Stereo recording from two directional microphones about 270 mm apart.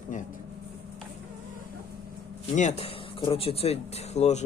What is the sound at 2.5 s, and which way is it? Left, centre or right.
Speech, left.